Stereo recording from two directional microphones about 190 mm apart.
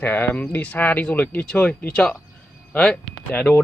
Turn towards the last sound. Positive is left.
turn(degrees=5)  # may be behind; listen again after turning